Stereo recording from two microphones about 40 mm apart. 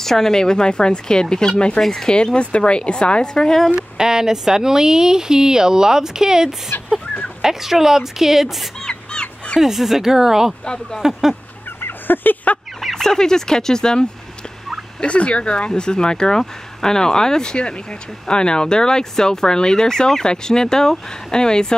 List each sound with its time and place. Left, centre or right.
0.0 s speech: centre
4.0 s speech: centre
6.7 s speech: left
7.4 s speech: centre
8.8 s crow: left
9.6 s speech: centre
10.6 s speech: left
11.0 s speech: centre
11.8 s fowl: left
12.9 s speech: centre
15.0 s speech: left